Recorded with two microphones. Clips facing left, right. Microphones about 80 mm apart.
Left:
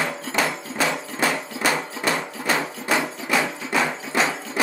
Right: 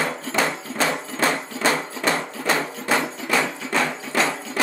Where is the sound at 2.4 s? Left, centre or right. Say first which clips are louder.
Right 1 dB; centre.